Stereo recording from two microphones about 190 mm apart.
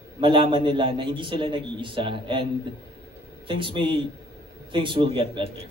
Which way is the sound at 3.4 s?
25° right (ahead or behind).